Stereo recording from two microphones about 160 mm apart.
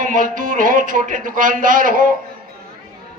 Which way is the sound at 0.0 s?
55° right (ahead or behind).